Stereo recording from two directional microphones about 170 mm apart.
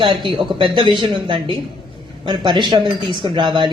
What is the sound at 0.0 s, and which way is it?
Speech, 30° right (ahead or behind).